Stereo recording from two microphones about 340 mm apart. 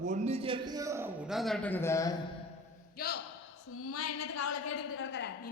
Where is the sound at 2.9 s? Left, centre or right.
Left.